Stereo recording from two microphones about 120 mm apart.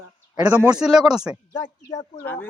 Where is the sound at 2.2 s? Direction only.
15° left (ahead or behind).